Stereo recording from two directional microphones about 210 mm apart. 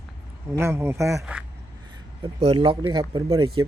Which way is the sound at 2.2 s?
25° right (ahead or behind).